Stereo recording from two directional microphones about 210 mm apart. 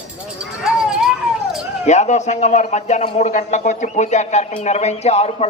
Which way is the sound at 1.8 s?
35° left (ahead or behind).